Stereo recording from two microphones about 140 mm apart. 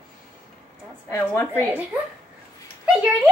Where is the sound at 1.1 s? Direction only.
15° left (ahead or behind).